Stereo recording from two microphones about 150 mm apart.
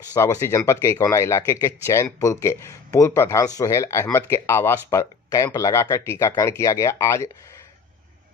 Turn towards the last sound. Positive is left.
turn(degrees=20)  # may be behind; listen again after turning